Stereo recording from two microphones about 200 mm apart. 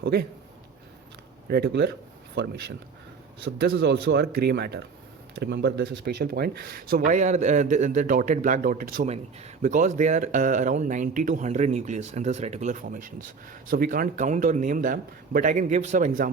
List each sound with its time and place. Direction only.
0.0 s speech: 55° right (ahead or behind)
1.5 s speech: 55° right (ahead or behind)